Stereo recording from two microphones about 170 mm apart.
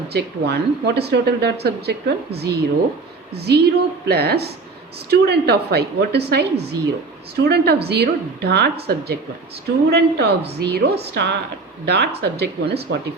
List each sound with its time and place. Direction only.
0.1 s speech: 75° right (ahead or behind)